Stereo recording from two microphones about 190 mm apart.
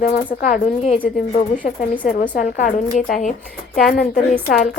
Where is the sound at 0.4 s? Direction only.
35° left (ahead or behind).